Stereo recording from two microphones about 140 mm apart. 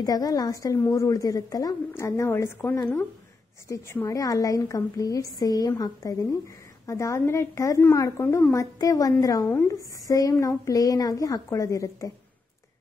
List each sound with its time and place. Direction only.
0.0 s a woman's voice: 25° left (ahead or behind)